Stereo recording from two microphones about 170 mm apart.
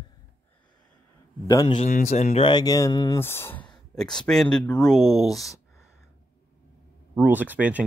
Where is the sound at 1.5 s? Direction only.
25° left (ahead or behind).